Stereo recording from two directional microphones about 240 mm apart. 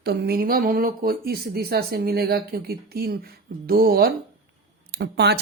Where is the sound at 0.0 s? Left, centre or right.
Right.